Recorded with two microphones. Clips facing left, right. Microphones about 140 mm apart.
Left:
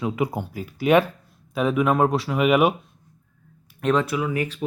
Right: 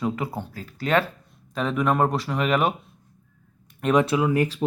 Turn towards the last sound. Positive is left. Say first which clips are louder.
# right 4 dB
turn(degrees=-40)  # may be behind; listen again after turning